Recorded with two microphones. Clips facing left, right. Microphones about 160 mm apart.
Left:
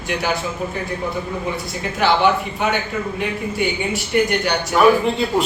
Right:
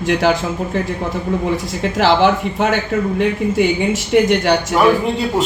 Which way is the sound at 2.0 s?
90° right.